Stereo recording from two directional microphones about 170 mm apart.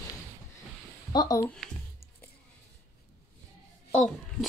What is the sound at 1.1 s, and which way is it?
Speech, 20° left (ahead or behind).